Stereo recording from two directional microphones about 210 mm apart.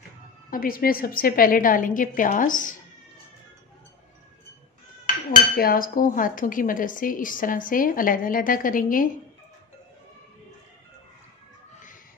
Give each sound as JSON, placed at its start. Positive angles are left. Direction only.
{"t": 0.5, "sound": "speech", "side_deg": 45}
{"t": 5.3, "sound": "speech", "side_deg": 45}